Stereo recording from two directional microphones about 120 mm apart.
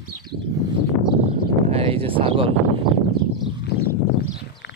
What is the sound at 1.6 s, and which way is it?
Speech, 60° right (ahead or behind).